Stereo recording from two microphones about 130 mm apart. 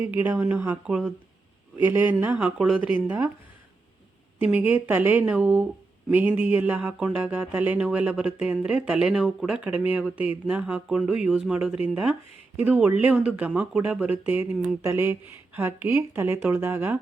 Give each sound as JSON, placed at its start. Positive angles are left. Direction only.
{"t": 0.0, "sound": "speech", "side_deg": -15}
{"t": 4.4, "sound": "speech", "side_deg": -15}